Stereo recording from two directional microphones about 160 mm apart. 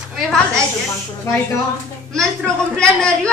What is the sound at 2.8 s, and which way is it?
Speech, 5° left (ahead or behind).